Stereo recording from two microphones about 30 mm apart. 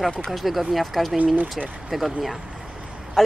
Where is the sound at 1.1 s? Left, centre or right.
Right.